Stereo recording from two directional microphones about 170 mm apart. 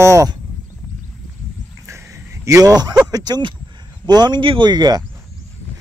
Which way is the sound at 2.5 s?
20° right (ahead or behind).